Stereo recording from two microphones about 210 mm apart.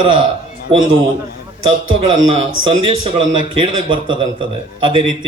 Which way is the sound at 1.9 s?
30° right (ahead or behind).